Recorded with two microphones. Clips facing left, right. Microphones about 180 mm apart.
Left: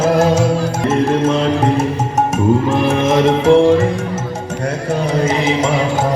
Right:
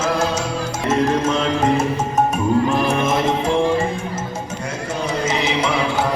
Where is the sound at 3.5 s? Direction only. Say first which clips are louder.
Left 10 dB; 90° left.